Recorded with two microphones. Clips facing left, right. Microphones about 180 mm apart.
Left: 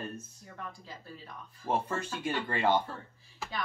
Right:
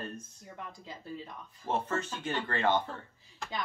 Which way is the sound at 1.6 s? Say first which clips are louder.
Even; 10° left (ahead or behind).